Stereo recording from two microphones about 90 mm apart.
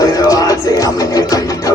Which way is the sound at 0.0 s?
40° left (ahead or behind).